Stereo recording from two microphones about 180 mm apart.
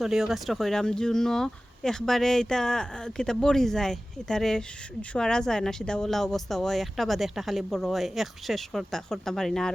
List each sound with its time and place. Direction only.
0.0 s speech: centre (ahead or behind)